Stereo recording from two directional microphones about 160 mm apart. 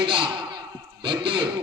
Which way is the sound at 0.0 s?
30° right (ahead or behind).